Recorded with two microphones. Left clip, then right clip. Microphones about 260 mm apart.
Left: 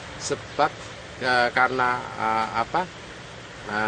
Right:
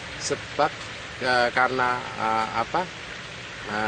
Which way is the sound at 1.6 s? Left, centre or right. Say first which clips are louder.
Left 1 dB; centre.